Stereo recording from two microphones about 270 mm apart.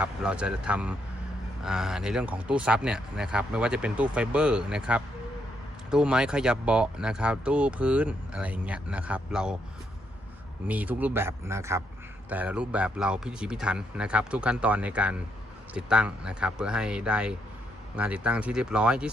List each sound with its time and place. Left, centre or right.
0.0 s speech: centre
10.7 s a man's voice: centre